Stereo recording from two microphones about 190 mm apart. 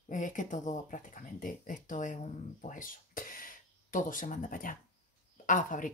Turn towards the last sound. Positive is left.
turn(degrees=45)  # may be behind; listen again after turning